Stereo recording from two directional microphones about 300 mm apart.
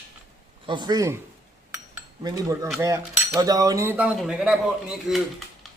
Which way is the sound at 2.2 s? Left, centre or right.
Centre.